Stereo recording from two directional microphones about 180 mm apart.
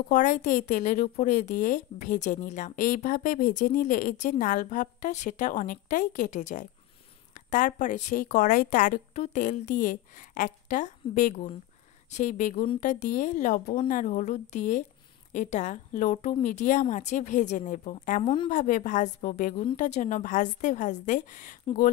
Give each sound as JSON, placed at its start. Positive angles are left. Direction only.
{"t": 0.1, "sound": "a woman's voice", "side_deg": 45}
{"t": 18.2, "sound": "a woman's voice", "side_deg": 25}
{"t": 18.5, "sound": "a woman's voice", "side_deg": 45}